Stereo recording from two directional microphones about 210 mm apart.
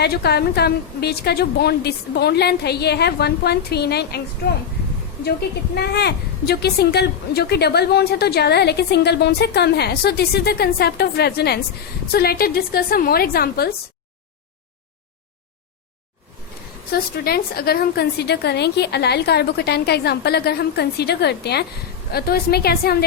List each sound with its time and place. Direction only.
0.0 s a woman's voice: 50° left (ahead or behind)
5.2 s a woman's voice: 50° left (ahead or behind)
16.9 s a woman's voice: 45° left (ahead or behind)